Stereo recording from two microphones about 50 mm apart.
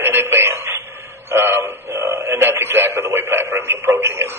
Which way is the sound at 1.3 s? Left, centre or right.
Right.